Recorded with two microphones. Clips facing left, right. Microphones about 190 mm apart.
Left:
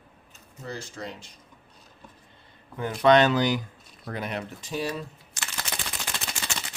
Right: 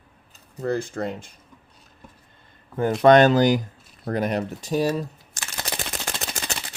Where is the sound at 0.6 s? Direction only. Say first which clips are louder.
Right 11 dB; 55° right (ahead or behind).